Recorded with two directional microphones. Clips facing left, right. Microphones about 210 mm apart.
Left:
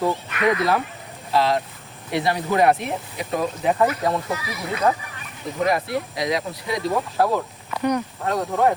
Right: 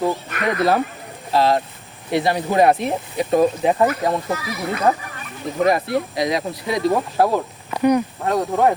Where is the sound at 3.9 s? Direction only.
45° right (ahead or behind).